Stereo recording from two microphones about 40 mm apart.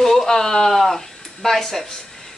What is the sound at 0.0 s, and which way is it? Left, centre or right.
Speech, centre.